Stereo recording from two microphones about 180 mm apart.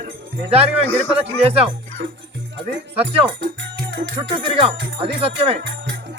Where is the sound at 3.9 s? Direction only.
85° right.